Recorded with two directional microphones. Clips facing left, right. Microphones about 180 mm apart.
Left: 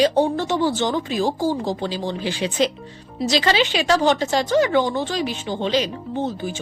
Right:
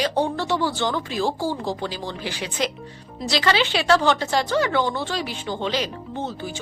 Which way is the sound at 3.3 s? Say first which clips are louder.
Left 1 dB; 20° left (ahead or behind).